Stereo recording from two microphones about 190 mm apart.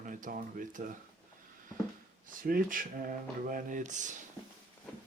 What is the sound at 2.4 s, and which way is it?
Speech, 50° right (ahead or behind).